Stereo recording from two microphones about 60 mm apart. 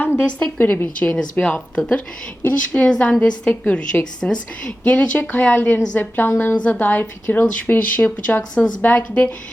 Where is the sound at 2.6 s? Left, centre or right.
Left.